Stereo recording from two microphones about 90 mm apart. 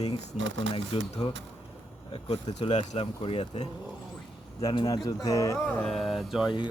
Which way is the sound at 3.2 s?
90° left.